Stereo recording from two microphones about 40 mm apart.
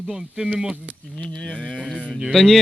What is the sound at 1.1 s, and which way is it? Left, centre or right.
Speech, left.